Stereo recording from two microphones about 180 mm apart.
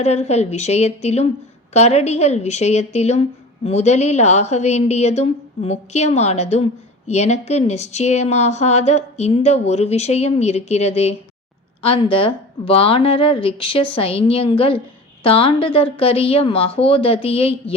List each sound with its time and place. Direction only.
0.0 s a woman's voice: 40° left (ahead or behind)